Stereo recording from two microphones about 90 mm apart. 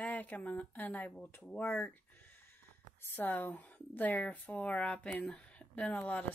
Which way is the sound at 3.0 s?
25° left (ahead or behind).